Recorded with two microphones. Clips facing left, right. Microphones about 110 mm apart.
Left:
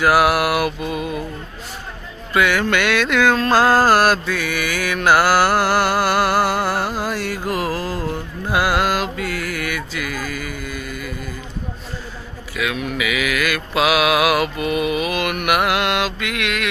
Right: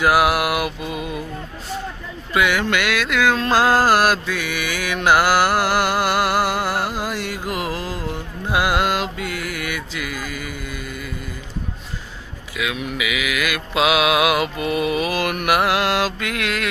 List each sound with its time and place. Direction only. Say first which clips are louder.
0.0 s mantra: left 1 dB; 20° right (ahead or behind)
2.3 s music: left 2 dB; 15° right (ahead or behind)
8.4 s mantra: left 1 dB; 20° right (ahead or behind)
12.5 s mantra: left 2 dB; 20° right (ahead or behind); by 16.6 s 35° right (ahead or behind)